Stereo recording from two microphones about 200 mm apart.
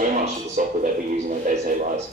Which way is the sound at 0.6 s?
40° right (ahead or behind).